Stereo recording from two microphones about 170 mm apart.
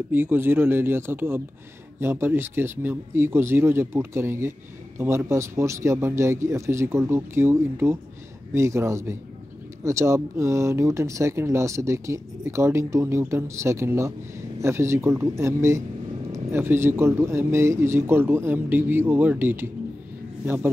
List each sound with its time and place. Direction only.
0.1 s speech: 10° right (ahead or behind)